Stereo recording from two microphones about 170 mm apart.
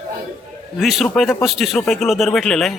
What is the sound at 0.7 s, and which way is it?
Speech, centre (ahead or behind).